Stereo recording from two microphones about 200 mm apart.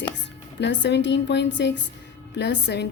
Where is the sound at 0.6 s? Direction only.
60° left (ahead or behind).